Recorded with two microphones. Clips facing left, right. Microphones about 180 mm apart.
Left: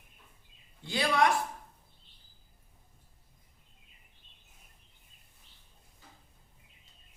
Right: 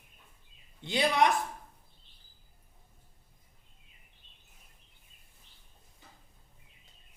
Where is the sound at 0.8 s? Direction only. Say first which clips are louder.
Right 1 dB; 20° right (ahead or behind).